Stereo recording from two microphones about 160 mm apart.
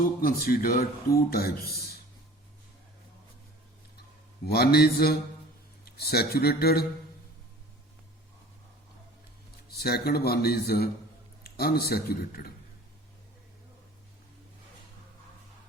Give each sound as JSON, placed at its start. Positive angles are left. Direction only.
{"t": 0.0, "sound": "speech", "side_deg": 65}
{"t": 4.4, "sound": "a man's voice", "side_deg": 80}
{"t": 9.6, "sound": "speech", "side_deg": 80}